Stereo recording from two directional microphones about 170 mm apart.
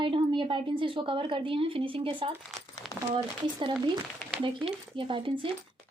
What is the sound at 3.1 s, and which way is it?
Speech, 30° right (ahead or behind).